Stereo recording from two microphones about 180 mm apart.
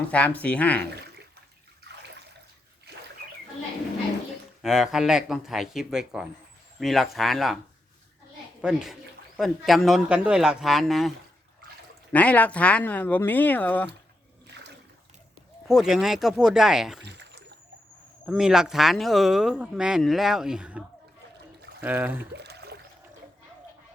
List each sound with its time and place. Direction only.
0.1 s speech: 10° left (ahead or behind)
4.6 s speech: centre (ahead or behind)
8.6 s speech: 5° right (ahead or behind)
12.1 s speech: 10° left (ahead or behind)
15.6 s speech: centre (ahead or behind)
17.1 s a sound: 70° right (ahead or behind)
18.3 s speech: 5° right (ahead or behind)
22.3 s a sound: 70° right (ahead or behind)